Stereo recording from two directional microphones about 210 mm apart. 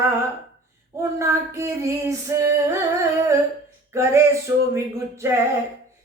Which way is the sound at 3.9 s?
15° right (ahead or behind).